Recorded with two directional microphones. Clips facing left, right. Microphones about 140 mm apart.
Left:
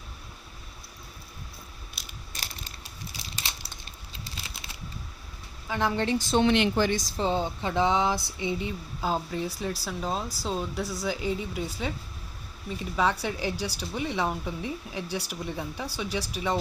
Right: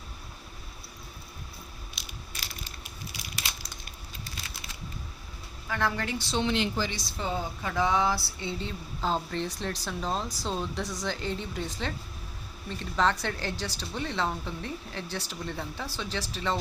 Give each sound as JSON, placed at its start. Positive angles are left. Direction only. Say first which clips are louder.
{"t": 5.6, "sound": "speech", "louder": "left 3 dB", "side_deg": 20}
{"t": 6.1, "sound": "speech", "louder": "left 7 dB", "side_deg": 50}
{"t": 7.2, "sound": "a sound", "louder": "left 3 dB", "side_deg": 30}